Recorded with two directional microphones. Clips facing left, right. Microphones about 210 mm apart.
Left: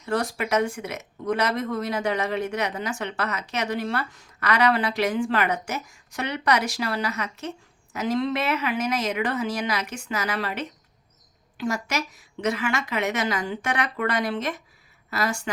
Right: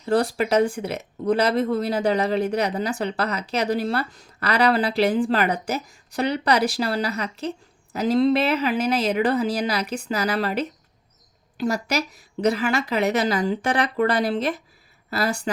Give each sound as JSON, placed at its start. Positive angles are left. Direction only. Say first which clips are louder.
{"t": 0.0, "sound": "speech", "louder": "right 5 dB", "side_deg": -35}